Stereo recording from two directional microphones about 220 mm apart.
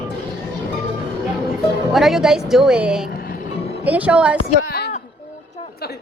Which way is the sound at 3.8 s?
5° right (ahead or behind).